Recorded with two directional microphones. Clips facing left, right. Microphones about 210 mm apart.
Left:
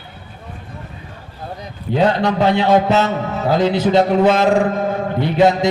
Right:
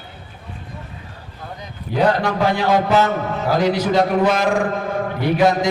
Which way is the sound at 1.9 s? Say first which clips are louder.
Left 2 dB; 25° left (ahead or behind).